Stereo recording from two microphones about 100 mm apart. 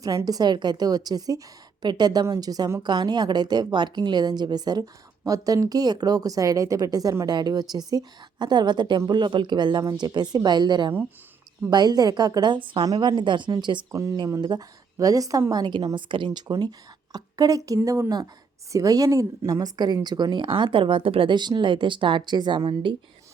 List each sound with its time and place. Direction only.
0.0 s a woman's voice: 35° right (ahead or behind)
2.8 s a woman's voice: 45° right (ahead or behind)
12.8 s a woman's voice: 45° right (ahead or behind)
13.9 s a woman's voice: 30° right (ahead or behind)
16.0 s a woman's voice: 55° right (ahead or behind)